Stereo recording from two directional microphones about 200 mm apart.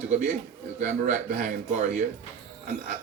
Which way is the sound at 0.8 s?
40° right (ahead or behind).